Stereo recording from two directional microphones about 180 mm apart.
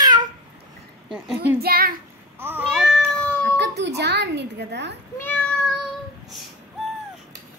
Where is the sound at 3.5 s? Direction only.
70° right (ahead or behind).